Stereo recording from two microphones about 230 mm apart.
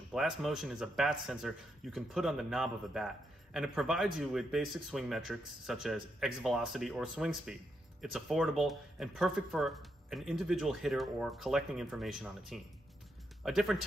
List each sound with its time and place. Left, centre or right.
0.1 s speech: centre